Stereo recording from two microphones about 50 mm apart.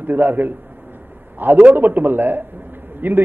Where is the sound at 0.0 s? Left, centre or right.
Right.